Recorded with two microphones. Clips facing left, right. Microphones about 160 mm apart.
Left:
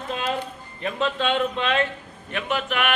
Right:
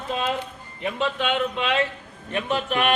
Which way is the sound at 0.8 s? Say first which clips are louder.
Left 1 dB; 10° right (ahead or behind).